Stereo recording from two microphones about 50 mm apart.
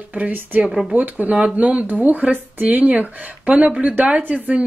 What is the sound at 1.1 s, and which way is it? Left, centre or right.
Speech, right.